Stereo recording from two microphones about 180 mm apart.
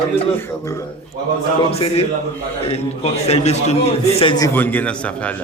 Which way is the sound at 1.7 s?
30° left (ahead or behind).